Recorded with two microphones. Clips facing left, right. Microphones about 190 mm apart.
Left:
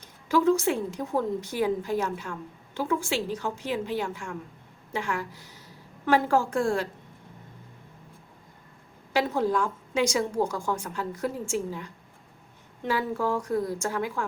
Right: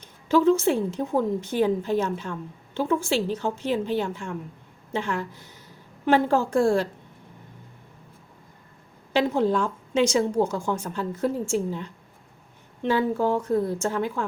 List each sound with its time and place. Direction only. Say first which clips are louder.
0.0 s a woman's voice: right 3 dB; 25° right (ahead or behind)
9.1 s a woman's voice: right 3 dB; 25° right (ahead or behind)